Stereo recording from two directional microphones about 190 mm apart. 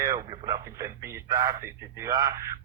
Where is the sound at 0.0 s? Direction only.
20° right (ahead or behind).